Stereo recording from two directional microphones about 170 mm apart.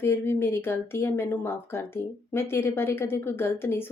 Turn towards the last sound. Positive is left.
turn(degrees=15)  # may be behind; listen again after turning